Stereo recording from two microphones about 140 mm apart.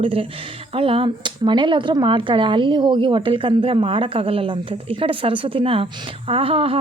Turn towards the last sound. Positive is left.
turn(degrees=-40)  # may be behind; listen again after turning